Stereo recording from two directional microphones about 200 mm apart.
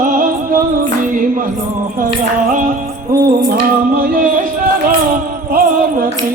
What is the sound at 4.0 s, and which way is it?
Speech, 40° right (ahead or behind).